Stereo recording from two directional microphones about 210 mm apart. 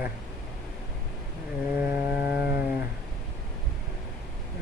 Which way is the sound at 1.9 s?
5° right (ahead or behind).